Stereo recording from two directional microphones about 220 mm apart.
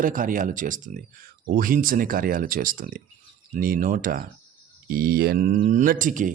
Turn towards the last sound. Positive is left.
turn(degrees=-35)  # may be behind; listen again after turning